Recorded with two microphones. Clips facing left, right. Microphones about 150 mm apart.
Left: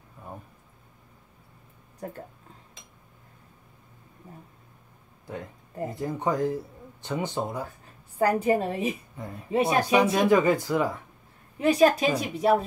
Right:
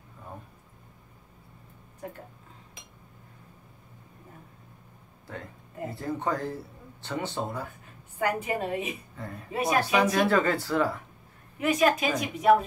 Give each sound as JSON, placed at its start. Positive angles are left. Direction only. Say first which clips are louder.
{"t": 5.9, "sound": "speech", "louder": "left 3 dB", "side_deg": 15}
{"t": 8.2, "sound": "a woman's voice", "louder": "left 6 dB", "side_deg": 35}
{"t": 11.5, "sound": "a woman's voice", "louder": "left 4 dB", "side_deg": 30}